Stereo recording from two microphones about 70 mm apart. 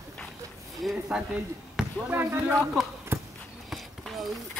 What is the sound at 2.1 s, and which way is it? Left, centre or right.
Speech, right.